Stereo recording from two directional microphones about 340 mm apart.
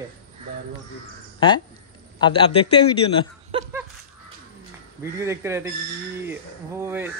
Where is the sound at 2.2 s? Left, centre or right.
Centre.